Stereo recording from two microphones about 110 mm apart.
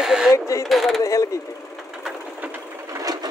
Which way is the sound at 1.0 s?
30° left (ahead or behind).